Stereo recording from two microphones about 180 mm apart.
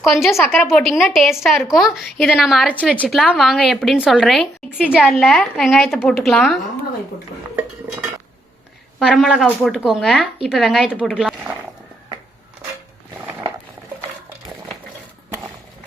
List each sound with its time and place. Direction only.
0.0 s a woman's voice: centre (ahead or behind)
9.0 s a woman's voice: centre (ahead or behind)